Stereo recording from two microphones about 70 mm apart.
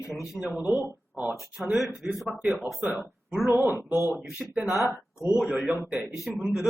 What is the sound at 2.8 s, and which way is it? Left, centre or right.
Speech, centre.